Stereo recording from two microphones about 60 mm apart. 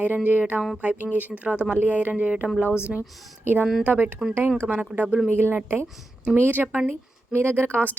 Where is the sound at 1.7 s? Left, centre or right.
Right.